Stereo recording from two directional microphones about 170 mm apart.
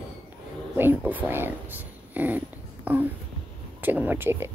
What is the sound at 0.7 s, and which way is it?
Speech, 10° right (ahead or behind).